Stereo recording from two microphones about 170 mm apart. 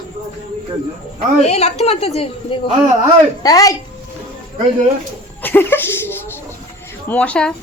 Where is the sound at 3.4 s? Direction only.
20° left (ahead or behind).